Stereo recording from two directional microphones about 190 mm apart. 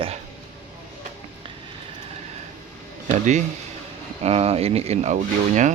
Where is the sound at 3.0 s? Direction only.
40° right (ahead or behind).